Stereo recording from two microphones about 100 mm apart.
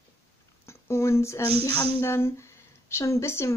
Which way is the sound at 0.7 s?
25° left (ahead or behind).